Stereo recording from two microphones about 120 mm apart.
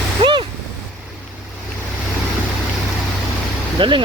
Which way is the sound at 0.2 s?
40° right (ahead or behind).